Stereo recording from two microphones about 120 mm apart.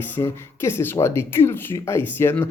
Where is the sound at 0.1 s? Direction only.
20° left (ahead or behind).